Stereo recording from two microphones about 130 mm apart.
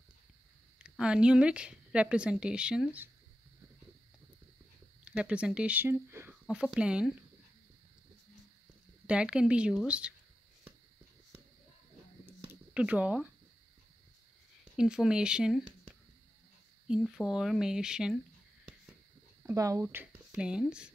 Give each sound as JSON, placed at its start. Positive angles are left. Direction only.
{"t": 0.7, "sound": "speech", "side_deg": -5}
{"t": 5.0, "sound": "speech", "side_deg": -10}
{"t": 6.5, "sound": "speech", "side_deg": -5}
{"t": 9.0, "sound": "speech", "side_deg": -10}
{"t": 12.7, "sound": "speech", "side_deg": -10}
{"t": 14.6, "sound": "speech", "side_deg": -5}
{"t": 16.8, "sound": "speech", "side_deg": -5}
{"t": 19.4, "sound": "speech", "side_deg": -25}